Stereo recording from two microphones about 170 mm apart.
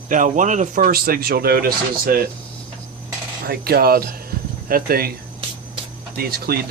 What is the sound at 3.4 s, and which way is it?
Speech, 65° right (ahead or behind).